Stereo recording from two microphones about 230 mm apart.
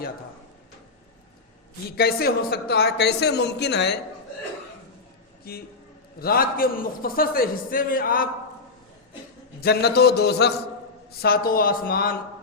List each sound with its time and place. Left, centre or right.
2.0 s a man's voice: left
5.5 s a man's voice: left
9.6 s a man's voice: left